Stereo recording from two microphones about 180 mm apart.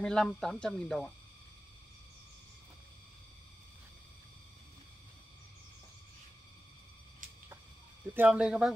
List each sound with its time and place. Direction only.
0.0 s speech: 5° left (ahead or behind)
8.0 s speech: 10° right (ahead or behind)